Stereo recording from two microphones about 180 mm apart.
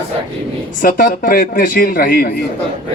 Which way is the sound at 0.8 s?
50° left (ahead or behind).